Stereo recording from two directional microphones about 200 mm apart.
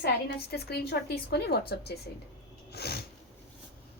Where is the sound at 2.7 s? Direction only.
55° left (ahead or behind).